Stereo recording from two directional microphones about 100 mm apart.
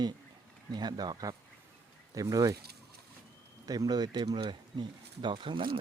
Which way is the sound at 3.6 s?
40° right (ahead or behind).